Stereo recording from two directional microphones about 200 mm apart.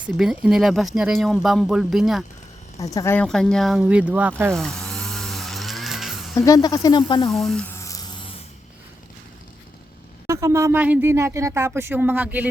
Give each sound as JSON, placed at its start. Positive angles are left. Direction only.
{"t": 0.2, "sound": "speech", "side_deg": -5}
{"t": 2.7, "sound": "speech", "side_deg": 15}
{"t": 4.5, "sound": "snoring", "side_deg": 0}
{"t": 6.4, "sound": "speech", "side_deg": 20}
{"t": 7.3, "sound": "speech", "side_deg": 0}
{"t": 7.8, "sound": "a sound", "side_deg": 15}
{"t": 10.2, "sound": "speech", "side_deg": -15}